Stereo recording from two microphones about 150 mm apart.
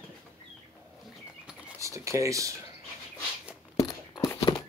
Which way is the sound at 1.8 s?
20° right (ahead or behind).